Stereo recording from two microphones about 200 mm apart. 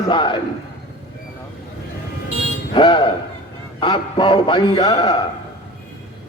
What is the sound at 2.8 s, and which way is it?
A man's voice, 25° left (ahead or behind).